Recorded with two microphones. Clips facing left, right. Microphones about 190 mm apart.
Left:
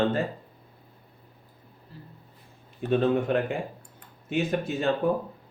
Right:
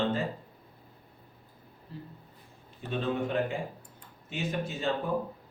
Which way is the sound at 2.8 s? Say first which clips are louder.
Left 8 dB; 60° left (ahead or behind).